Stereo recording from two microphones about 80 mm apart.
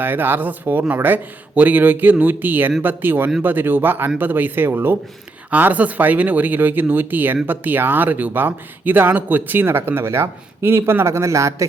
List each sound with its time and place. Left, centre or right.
0.0 s speech: right